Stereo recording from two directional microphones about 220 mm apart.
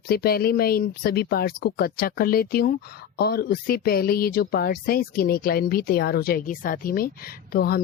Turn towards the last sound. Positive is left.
turn(degrees=45)  # may be behind; listen again after turning